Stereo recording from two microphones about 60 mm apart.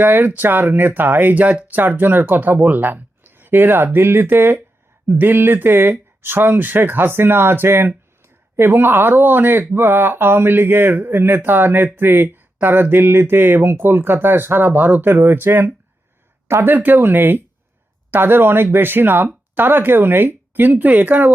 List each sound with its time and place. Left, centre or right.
0.0 s speech: right
16.7 s speech: right